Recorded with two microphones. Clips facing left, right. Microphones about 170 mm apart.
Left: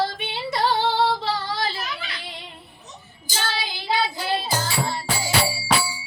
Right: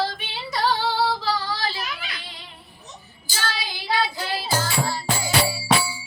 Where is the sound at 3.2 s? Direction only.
20° left (ahead or behind).